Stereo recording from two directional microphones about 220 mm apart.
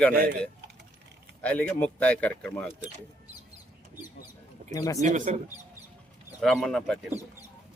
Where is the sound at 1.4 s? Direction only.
5° left (ahead or behind).